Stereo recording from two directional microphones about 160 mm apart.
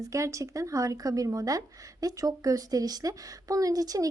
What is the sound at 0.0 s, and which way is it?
Speech, 20° right (ahead or behind).